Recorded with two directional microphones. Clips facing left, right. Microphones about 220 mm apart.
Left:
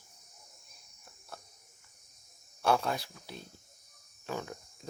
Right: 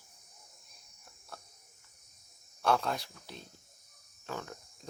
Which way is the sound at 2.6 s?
5° left (ahead or behind).